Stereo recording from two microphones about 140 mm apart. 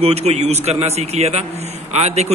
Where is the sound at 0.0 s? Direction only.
50° right (ahead or behind).